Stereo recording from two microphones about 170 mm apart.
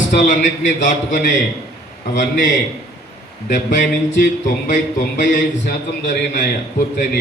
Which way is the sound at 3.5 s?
50° left (ahead or behind).